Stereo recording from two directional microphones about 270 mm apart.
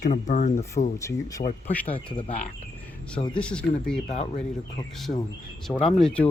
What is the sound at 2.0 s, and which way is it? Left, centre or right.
Cricket, centre.